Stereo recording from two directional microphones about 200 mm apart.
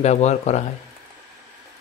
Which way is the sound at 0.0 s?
35° left (ahead or behind).